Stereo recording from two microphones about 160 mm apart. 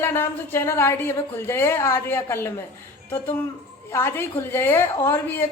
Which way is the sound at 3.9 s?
15° left (ahead or behind).